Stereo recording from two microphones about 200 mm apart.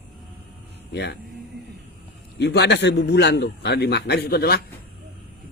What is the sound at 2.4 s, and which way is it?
A man's voice, 55° left (ahead or behind).